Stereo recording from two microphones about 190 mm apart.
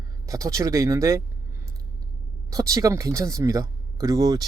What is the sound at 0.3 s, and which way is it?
Speech, 15° right (ahead or behind).